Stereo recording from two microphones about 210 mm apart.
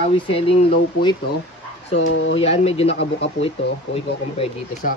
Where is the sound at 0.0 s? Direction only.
25° left (ahead or behind).